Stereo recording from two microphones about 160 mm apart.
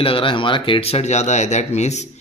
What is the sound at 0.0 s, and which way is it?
Speech, 35° left (ahead or behind).